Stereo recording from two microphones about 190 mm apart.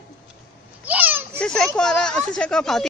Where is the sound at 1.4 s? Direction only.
5° left (ahead or behind).